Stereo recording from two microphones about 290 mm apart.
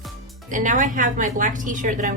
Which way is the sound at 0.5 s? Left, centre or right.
Right.